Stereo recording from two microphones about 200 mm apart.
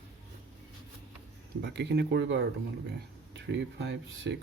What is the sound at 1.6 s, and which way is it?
Speech, 60° right (ahead or behind).